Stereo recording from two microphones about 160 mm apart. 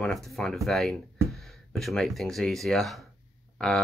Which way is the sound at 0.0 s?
5° left (ahead or behind).